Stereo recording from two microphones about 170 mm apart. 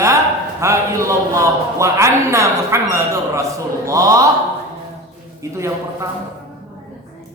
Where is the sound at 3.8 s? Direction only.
20° right (ahead or behind).